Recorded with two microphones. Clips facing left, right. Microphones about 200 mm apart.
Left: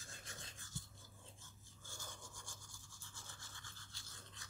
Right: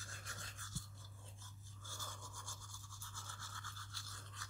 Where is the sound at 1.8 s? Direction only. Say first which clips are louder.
Right 1 dB; 15° left (ahead or behind).